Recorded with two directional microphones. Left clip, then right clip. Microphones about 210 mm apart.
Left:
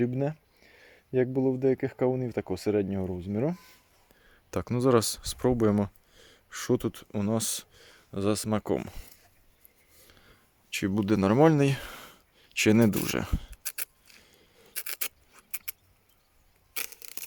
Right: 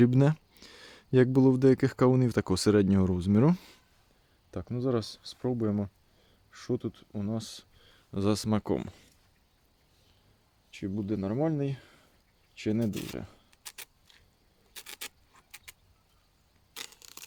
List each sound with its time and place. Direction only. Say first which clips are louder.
0.0 s speech: right 4 dB; 30° right (ahead or behind)
4.5 s speech: left 7 dB; 35° left (ahead or behind)
8.1 s speech: left 1 dB; 5° right (ahead or behind)
10.7 s speech: left 7 dB; 40° left (ahead or behind)
13.5 s a sound: left 6 dB; 15° left (ahead or behind)
16.7 s a sound: left 5 dB; 10° left (ahead or behind)